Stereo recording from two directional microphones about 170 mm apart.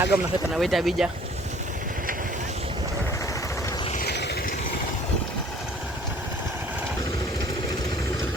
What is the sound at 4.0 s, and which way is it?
Vehicle, 70° left (ahead or behind).